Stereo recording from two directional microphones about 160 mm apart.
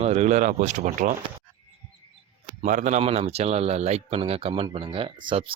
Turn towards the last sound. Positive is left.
turn(degrees=-30)  # may be behind; listen again after turning